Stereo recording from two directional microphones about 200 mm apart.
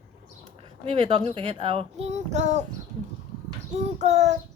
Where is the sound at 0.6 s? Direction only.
25° right (ahead or behind).